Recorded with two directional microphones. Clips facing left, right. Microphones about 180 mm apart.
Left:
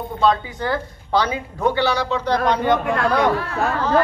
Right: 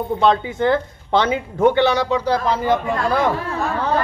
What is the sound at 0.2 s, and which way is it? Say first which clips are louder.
Speech: right 1 dB; 25° right (ahead or behind).